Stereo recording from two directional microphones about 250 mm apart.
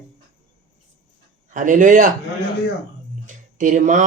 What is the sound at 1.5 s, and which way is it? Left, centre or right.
Speech, right.